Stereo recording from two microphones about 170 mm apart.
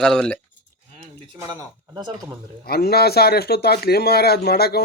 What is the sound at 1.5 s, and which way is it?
Speech, 25° right (ahead or behind).